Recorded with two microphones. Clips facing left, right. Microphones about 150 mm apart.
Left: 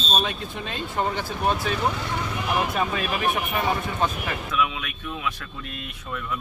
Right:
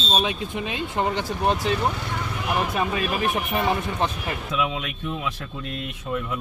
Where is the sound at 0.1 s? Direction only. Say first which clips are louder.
Right 2 dB; 15° right (ahead or behind).